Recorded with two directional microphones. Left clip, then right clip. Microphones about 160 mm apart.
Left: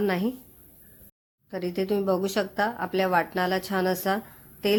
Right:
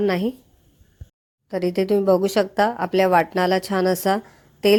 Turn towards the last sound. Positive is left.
turn(degrees=-35)  # may be behind; listen again after turning